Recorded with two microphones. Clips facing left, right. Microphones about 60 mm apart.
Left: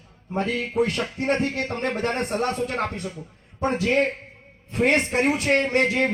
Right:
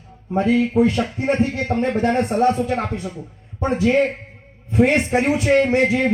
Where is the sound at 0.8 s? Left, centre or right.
Left.